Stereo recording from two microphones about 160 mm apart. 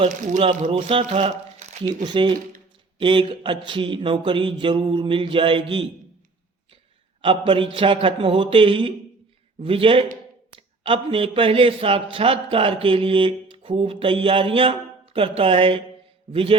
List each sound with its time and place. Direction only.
0.0 s speech: 35° right (ahead or behind)
2.0 s speech: 30° right (ahead or behind)
7.2 s speech: 35° right (ahead or behind)